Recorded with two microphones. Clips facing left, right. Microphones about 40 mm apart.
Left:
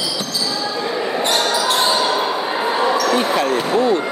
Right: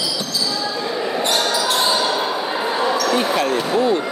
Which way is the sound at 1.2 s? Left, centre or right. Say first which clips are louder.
Left 2 dB; left.